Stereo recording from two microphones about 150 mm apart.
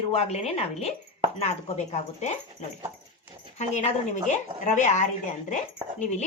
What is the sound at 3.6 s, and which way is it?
Speech, 50° left (ahead or behind).